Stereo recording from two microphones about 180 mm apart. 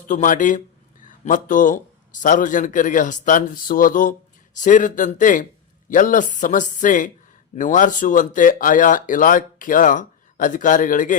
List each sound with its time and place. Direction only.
0.1 s speech: 45° left (ahead or behind)